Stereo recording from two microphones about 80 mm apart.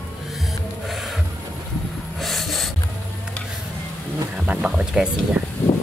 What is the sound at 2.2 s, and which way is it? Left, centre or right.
Snort, centre.